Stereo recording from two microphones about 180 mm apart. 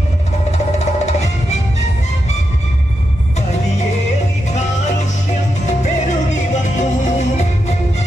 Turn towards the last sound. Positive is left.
turn(degrees=40)  # may be behind; listen again after turning